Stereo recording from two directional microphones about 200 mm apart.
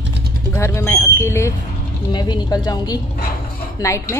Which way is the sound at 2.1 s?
20° left (ahead or behind).